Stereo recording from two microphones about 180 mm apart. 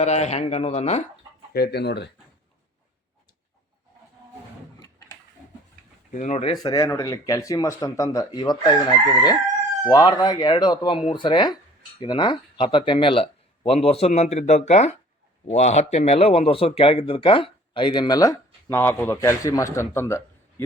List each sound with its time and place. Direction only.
0.0 s speech: 40° left (ahead or behind)
1.5 s speech: 65° left (ahead or behind)
6.1 s speech: 40° left (ahead or behind)
6.5 s speech: 20° left (ahead or behind)
9.9 s speech: 20° left (ahead or behind)